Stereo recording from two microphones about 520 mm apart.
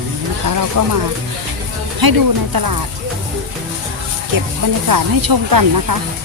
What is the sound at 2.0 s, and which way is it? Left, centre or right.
Speech, right.